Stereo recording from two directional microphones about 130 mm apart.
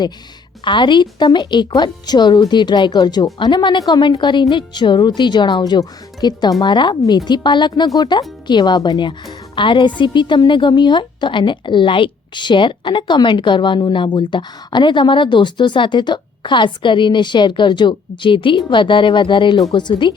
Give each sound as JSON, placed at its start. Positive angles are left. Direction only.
{"t": 0.6, "sound": "a woman's voice", "side_deg": 35}